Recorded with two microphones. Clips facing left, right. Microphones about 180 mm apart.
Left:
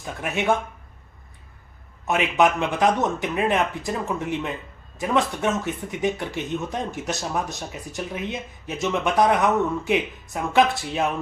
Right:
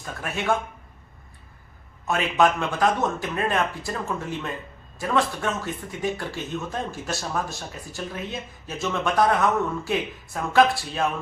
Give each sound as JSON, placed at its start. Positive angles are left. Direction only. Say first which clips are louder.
{"t": 0.0, "sound": "speech", "louder": "left 4 dB", "side_deg": 15}
{"t": 2.0, "sound": "speech", "louder": "left 1 dB", "side_deg": 20}